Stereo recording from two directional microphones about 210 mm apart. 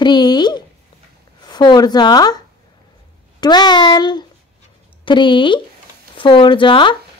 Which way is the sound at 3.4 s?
20° left (ahead or behind).